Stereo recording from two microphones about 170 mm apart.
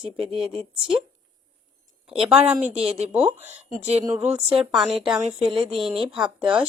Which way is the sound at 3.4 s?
40° right (ahead or behind).